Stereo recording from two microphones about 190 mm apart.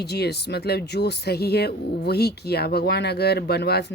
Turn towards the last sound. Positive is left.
turn(degrees=60)  # may be behind; listen again after turning